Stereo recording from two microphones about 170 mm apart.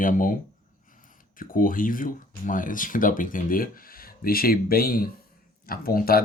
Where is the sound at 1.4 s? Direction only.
55° left (ahead or behind).